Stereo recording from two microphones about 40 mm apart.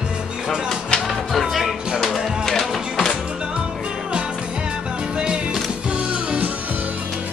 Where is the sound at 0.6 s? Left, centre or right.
Centre.